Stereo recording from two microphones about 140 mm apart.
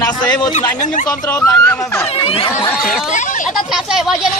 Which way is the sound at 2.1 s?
40° left (ahead or behind).